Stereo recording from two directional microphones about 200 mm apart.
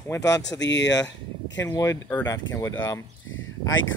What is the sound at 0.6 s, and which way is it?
Speech, 60° left (ahead or behind).